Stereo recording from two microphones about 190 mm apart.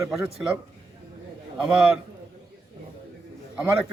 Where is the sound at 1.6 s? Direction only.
5° right (ahead or behind).